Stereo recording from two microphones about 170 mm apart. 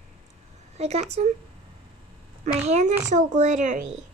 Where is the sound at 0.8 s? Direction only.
40° right (ahead or behind).